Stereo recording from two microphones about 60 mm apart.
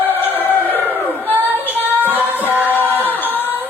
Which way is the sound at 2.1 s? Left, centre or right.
Right.